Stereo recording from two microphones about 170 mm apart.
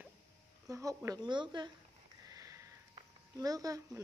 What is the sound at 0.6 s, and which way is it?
Speech, 20° right (ahead or behind).